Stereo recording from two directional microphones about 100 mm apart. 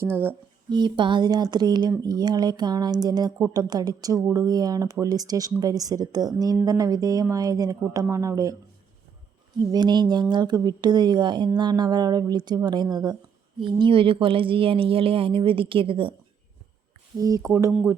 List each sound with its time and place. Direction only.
0.0 s speech: 25° right (ahead or behind)
0.7 s speech: 50° right (ahead or behind); by 8.5 s 35° right (ahead or behind)
9.6 s speech: 40° right (ahead or behind); by 16.1 s 60° right (ahead or behind)
17.2 s speech: 35° right (ahead or behind)